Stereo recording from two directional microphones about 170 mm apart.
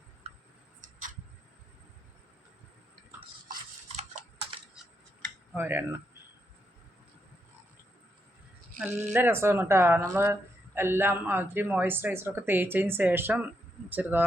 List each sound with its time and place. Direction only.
5.5 s speech: 15° right (ahead or behind)
8.9 s speech: 45° right (ahead or behind)
9.1 s speech: 15° right (ahead or behind)